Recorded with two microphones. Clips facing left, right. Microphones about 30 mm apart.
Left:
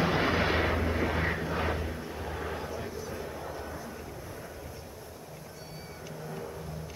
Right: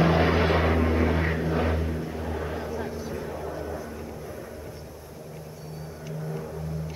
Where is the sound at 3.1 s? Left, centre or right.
Centre.